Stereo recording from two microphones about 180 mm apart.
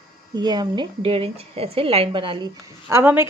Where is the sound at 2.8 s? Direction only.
15° right (ahead or behind).